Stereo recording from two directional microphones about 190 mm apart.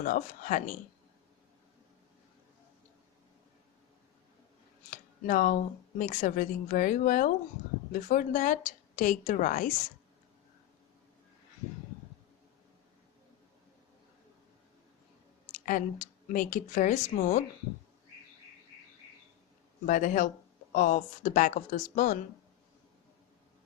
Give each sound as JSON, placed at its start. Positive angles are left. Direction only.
{"t": 0.0, "sound": "a woman's voice", "side_deg": 45}
{"t": 4.9, "sound": "a sound", "side_deg": 45}
{"t": 6.0, "sound": "a woman's voice", "side_deg": 45}
{"t": 15.6, "sound": "a woman's voice", "side_deg": 45}
{"t": 19.8, "sound": "a woman's voice", "side_deg": 45}